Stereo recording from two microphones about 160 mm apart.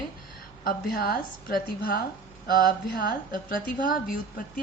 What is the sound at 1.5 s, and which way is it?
A woman's voice, 65° left (ahead or behind).